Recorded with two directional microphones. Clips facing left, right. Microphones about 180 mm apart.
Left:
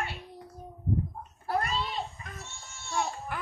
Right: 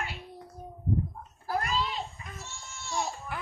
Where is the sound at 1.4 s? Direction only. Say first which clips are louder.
Even; 30° left (ahead or behind).